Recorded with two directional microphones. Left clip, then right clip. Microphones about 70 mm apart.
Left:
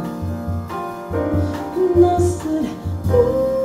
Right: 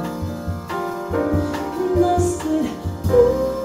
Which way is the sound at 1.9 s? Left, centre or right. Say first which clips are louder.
Left 2 dB; centre.